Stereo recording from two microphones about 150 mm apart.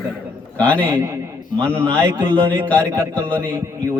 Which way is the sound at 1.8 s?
20° right (ahead or behind).